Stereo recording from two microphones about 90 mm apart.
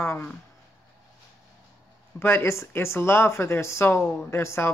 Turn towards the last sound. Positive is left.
turn(degrees=30)  # may be behind; listen again after turning